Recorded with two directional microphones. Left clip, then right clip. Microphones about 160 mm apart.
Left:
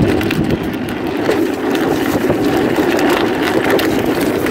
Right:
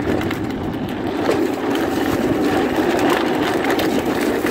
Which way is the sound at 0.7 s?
55° left (ahead or behind).